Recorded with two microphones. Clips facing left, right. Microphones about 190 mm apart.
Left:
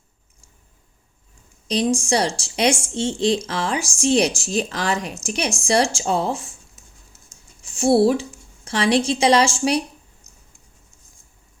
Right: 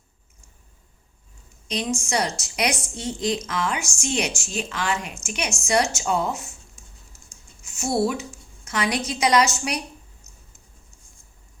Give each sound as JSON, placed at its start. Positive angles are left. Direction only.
{"t": 1.6, "sound": "a woman's voice", "side_deg": 35}
{"t": 7.6, "sound": "a woman's voice", "side_deg": 30}